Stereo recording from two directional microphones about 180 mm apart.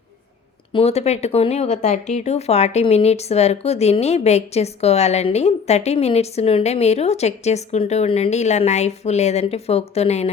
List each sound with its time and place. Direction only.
0.7 s speech: 35° left (ahead or behind)